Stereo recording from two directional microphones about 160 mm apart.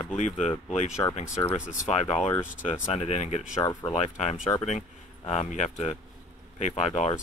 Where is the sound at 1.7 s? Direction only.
45° left (ahead or behind).